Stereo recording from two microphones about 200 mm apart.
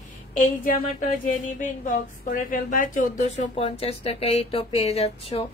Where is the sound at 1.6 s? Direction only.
40° left (ahead or behind).